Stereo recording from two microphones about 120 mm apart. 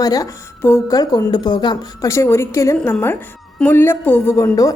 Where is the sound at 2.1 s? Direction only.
25° left (ahead or behind).